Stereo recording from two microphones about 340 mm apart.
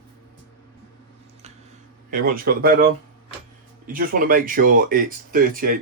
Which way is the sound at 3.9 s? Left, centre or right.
Right.